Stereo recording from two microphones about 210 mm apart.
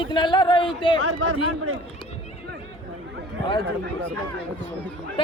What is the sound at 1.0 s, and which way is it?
Speech, 75° right (ahead or behind).